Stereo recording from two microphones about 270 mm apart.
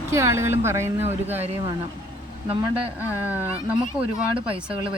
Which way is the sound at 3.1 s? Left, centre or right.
Centre.